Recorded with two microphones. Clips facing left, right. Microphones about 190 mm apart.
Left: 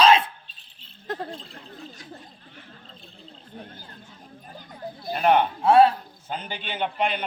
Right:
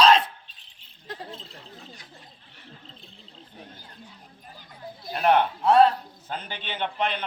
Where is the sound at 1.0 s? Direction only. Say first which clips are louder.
Left 7 dB; 55° left (ahead or behind).